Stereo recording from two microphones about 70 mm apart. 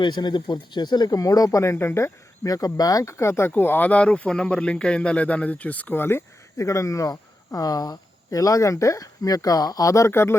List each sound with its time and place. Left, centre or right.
0.0 s speech: left
1.7 s speech: left
2.4 s speech: left
3.0 s speech: left
3.5 s speech: left
3.8 s speech: centre; by 6.2 s left
6.6 s speech: left
10.1 s speech: left